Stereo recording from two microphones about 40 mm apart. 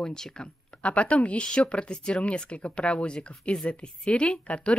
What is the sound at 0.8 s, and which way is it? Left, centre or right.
Speech, left.